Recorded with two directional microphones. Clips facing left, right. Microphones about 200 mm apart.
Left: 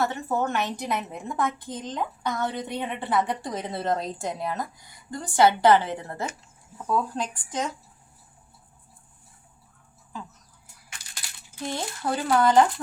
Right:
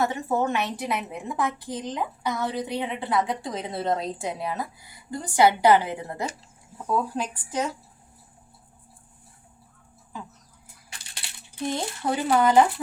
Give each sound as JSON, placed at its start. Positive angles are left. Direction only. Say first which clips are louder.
{"t": 0.0, "sound": "a woman's voice", "louder": "right 2 dB", "side_deg": -10}
{"t": 10.8, "sound": "coin", "louder": "right 1 dB", "side_deg": -30}
{"t": 12.1, "sound": "speech", "louder": "right 1 dB", "side_deg": -10}